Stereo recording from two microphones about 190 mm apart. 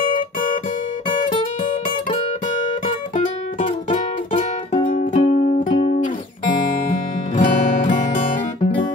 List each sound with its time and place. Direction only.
3.9 s guitar: 40° left (ahead or behind)
4.8 s music: 40° left (ahead or behind)
7.3 s music: 45° left (ahead or behind)